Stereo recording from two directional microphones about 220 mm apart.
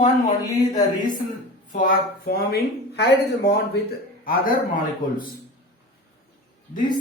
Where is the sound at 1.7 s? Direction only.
40° left (ahead or behind).